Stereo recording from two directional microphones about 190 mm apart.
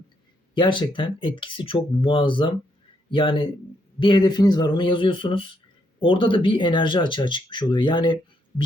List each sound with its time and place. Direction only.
0.5 s speech: 25° left (ahead or behind)